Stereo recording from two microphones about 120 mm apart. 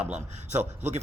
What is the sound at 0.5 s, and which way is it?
Speech, 70° right (ahead or behind).